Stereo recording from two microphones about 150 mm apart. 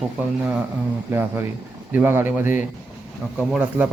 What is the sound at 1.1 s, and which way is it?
Speech, 15° right (ahead or behind).